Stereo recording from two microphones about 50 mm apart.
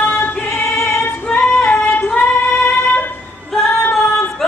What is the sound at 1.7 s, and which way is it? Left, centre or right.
Female singing, left.